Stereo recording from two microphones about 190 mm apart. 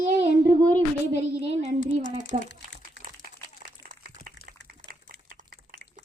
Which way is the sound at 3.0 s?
70° left (ahead or behind).